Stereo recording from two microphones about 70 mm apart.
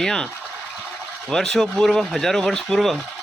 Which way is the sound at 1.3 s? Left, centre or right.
Centre.